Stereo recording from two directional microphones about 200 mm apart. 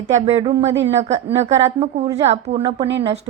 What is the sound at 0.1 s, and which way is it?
A woman's voice, 35° right (ahead or behind).